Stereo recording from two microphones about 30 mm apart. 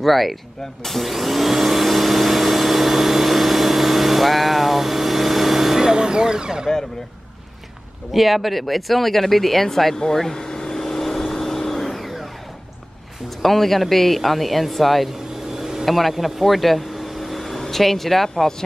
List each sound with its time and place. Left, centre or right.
0.0 s speech: centre
0.8 s vacuum cleaner: centre
5.8 s speech: right
8.1 s speech: centre
10.1 s vehicle: centre
13.4 s speech: centre
15.5 s vehicle: centre
15.8 s speech: centre
16.3 s vehicle: centre